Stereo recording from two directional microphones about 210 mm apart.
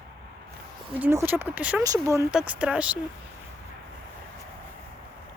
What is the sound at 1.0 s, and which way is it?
Speech, 10° right (ahead or behind).